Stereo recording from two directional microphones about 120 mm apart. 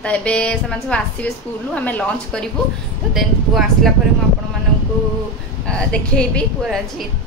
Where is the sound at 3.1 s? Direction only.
Centre (ahead or behind).